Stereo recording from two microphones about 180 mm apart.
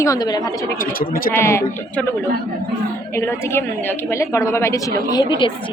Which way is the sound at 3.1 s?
15° left (ahead or behind).